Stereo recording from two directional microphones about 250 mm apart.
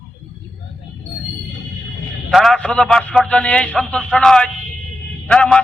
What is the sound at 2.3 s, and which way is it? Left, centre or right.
A man's voice, centre.